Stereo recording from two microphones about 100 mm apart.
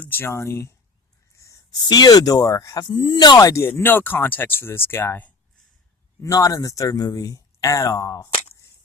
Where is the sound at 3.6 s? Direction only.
20° left (ahead or behind).